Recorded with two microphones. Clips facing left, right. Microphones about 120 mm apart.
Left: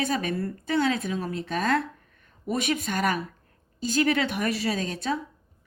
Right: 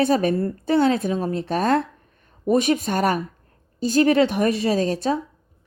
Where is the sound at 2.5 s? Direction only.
30° right (ahead or behind).